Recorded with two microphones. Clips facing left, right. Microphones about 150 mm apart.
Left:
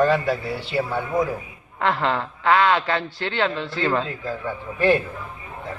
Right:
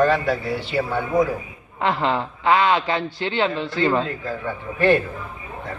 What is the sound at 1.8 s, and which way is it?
A man's voice, 20° right (ahead or behind).